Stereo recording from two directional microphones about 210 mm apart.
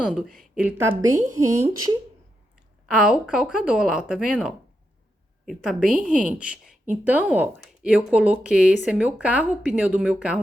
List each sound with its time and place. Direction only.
0.0 s speech: centre (ahead or behind)
2.8 s speech: 5° right (ahead or behind)